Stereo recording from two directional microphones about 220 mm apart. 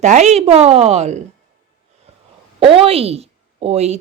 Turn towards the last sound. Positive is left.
turn(degrees=-30)  # may be behind; listen again after turning